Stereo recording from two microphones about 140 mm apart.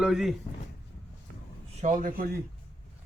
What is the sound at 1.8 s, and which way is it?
Speech, 65° right (ahead or behind).